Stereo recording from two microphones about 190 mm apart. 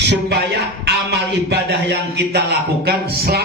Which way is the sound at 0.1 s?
60° right (ahead or behind).